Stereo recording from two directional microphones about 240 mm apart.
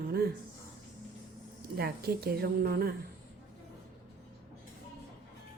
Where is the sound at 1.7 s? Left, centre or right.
Right.